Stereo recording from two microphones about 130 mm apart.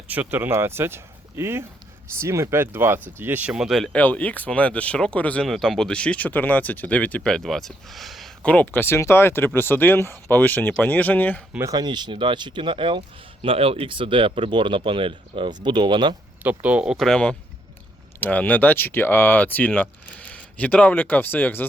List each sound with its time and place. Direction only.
0.1 s speech: 15° right (ahead or behind)
3.9 s speech: 10° left (ahead or behind)
8.4 s speech: 10° left (ahead or behind)
11.7 s speech: 35° right (ahead or behind)
16.4 s speech: 10° right (ahead or behind); by 21.7 s 15° left (ahead or behind)